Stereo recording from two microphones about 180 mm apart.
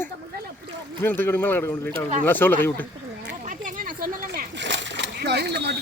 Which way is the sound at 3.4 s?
50° right (ahead or behind).